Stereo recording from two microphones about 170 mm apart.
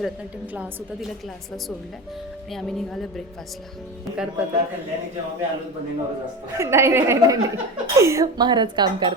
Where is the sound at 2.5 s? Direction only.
Centre (ahead or behind).